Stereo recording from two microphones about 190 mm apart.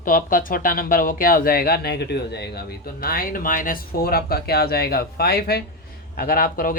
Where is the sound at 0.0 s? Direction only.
45° left (ahead or behind).